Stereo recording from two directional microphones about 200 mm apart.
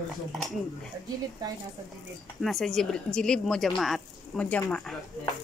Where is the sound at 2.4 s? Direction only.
Centre (ahead or behind).